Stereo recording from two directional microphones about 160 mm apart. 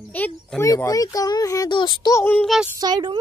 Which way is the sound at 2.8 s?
25° right (ahead or behind).